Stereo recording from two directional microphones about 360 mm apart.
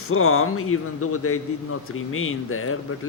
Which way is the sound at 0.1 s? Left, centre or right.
Left.